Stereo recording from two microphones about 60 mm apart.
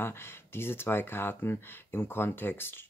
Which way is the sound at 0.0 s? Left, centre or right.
Left.